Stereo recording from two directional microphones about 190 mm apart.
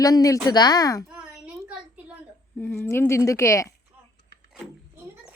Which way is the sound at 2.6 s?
10° left (ahead or behind).